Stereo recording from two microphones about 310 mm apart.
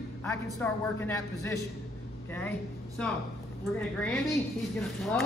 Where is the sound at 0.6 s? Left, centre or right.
Centre.